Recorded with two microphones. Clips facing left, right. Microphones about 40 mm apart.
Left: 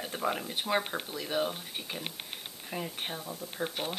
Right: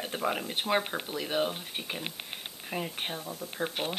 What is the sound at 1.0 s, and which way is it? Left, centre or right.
Speech, right.